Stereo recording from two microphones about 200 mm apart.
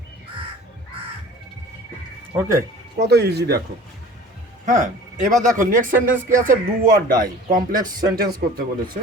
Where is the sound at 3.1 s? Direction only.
55° right (ahead or behind).